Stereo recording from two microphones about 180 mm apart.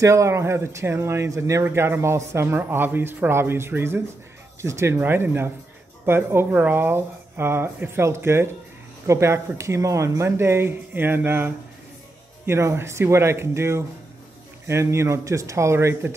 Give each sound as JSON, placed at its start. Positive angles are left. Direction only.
{"t": 0.0, "sound": "speech", "side_deg": -15}